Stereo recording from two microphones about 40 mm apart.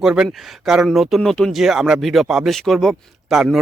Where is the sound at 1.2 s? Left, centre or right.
Centre.